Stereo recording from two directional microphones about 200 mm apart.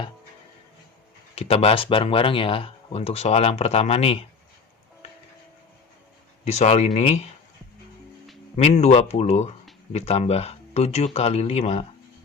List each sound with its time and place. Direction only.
1.4 s speech: 30° left (ahead or behind)
6.4 s speech: 35° left (ahead or behind)
8.5 s speech: 30° left (ahead or behind)